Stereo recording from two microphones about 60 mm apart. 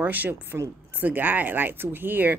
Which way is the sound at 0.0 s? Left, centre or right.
Right.